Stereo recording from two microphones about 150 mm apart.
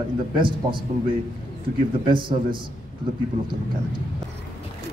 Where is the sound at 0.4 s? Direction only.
35° right (ahead or behind).